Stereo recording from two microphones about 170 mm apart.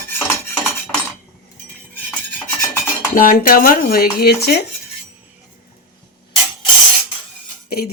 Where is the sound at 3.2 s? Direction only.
55° left (ahead or behind); by 4.6 s 75° left (ahead or behind).